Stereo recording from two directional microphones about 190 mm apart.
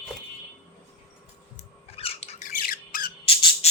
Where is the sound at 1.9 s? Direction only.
30° left (ahead or behind).